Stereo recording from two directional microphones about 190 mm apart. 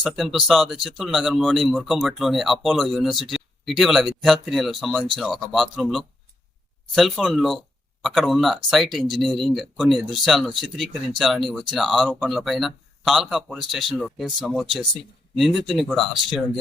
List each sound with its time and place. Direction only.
0.0 s speech: centre (ahead or behind)